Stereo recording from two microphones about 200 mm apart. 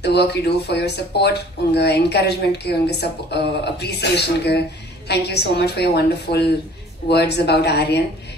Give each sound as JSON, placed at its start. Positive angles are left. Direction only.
{"t": 0.0, "sound": "speech", "side_deg": 55}